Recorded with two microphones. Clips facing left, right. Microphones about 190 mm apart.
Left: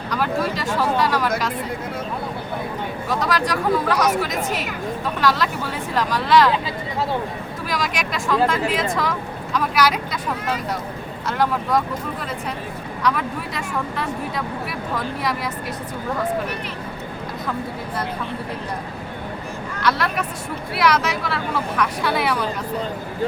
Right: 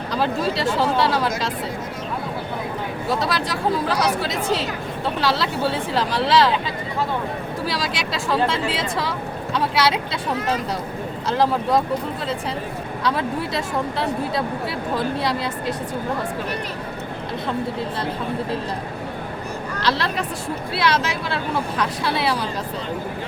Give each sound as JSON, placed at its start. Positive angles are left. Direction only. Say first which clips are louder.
{"t": 0.1, "sound": "speech", "louder": "even", "side_deg": -30}
{"t": 3.2, "sound": "speech", "louder": "left 2 dB", "side_deg": -25}
{"t": 7.7, "sound": "speech", "louder": "left 4 dB", "side_deg": -30}
{"t": 11.3, "sound": "speech", "louder": "right 2 dB", "side_deg": -30}
{"t": 13.0, "sound": "speech", "louder": "even", "side_deg": -30}
{"t": 19.7, "sound": "speech", "louder": "left 1 dB", "side_deg": -30}